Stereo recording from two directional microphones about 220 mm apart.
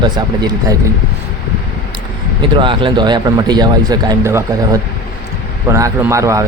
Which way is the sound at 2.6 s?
20° right (ahead or behind).